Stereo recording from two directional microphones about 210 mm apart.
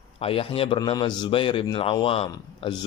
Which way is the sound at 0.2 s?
25° left (ahead or behind).